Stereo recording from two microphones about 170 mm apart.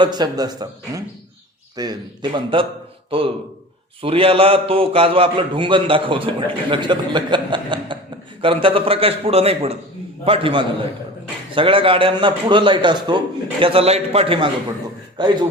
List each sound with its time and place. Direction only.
0.0 s a man's voice: 25° right (ahead or behind)